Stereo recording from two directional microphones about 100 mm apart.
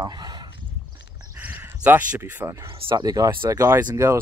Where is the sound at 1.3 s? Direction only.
15° right (ahead or behind).